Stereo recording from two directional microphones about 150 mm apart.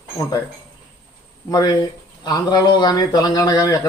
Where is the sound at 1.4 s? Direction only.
25° left (ahead or behind).